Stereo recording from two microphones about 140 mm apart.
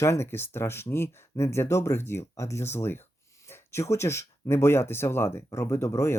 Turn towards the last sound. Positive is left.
turn(degrees=20)  # may be behind; listen again after turning